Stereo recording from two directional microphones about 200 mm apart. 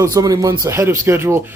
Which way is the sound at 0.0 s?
15° right (ahead or behind).